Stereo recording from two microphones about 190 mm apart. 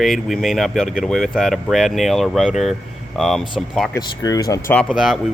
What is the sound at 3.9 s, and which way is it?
Speech, 20° left (ahead or behind).